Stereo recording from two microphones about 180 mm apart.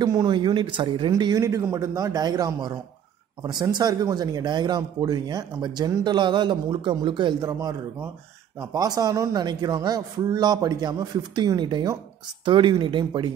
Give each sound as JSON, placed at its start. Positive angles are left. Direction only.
{"t": 0.0, "sound": "speech", "side_deg": -20}